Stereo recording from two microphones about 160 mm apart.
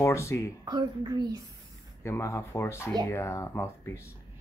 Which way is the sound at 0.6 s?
25° right (ahead or behind).